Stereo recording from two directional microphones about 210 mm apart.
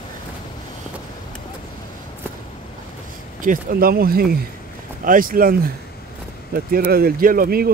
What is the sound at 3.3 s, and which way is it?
Speech, 40° right (ahead or behind).